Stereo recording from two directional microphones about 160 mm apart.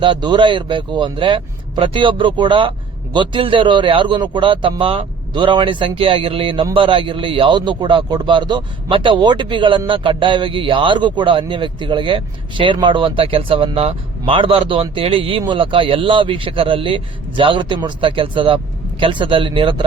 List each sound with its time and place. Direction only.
0.0 s a man's voice: 30° right (ahead or behind)